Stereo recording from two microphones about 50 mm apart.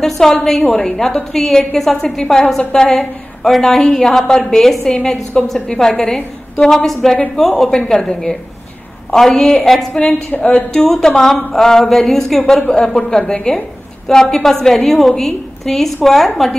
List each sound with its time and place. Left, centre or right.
0.0 s a woman's voice: centre